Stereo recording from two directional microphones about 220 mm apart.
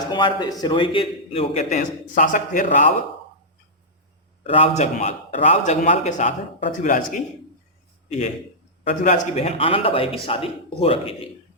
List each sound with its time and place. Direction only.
0.1 s a man's voice: 20° left (ahead or behind); by 2.9 s 35° left (ahead or behind)
4.4 s a man's voice: 25° left (ahead or behind)
8.8 s a man's voice: 30° left (ahead or behind)